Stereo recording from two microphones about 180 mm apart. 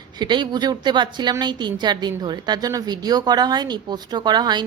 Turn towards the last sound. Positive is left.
turn(degrees=-25)  # may be behind; listen again after turning